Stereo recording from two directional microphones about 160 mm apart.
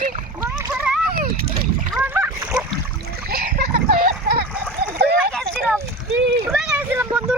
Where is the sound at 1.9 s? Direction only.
10° right (ahead or behind).